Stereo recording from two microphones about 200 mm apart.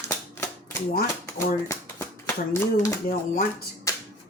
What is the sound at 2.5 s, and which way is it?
Speech, 15° left (ahead or behind).